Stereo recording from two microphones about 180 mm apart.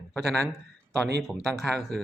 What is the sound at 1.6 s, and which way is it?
Speech, 5° left (ahead or behind).